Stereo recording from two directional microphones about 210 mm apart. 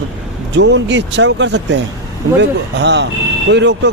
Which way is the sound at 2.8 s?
55° right (ahead or behind).